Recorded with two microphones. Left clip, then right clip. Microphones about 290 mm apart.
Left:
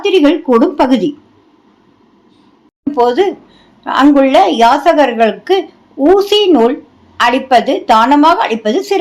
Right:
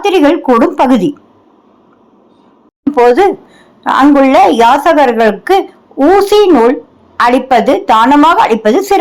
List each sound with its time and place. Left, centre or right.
0.0 s a woman's voice: right
2.9 s a woman's voice: right